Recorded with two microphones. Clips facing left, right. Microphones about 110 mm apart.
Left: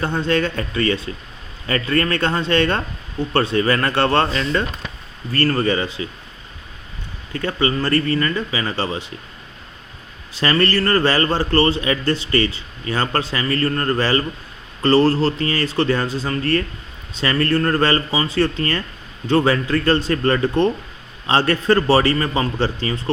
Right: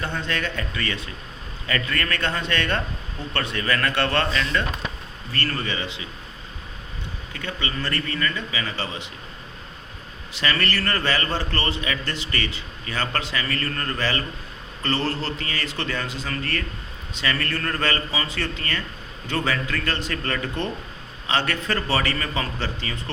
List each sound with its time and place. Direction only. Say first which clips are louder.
0.0 s a man's voice: left 8 dB; 35° left (ahead or behind)
7.3 s a man's voice: left 10 dB; 40° left (ahead or behind)
10.3 s a man's voice: left 7 dB; 35° left (ahead or behind)